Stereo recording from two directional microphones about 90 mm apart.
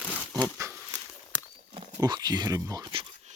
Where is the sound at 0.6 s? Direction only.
40° right (ahead or behind).